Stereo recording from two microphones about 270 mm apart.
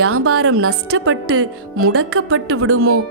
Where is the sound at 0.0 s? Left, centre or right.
Right.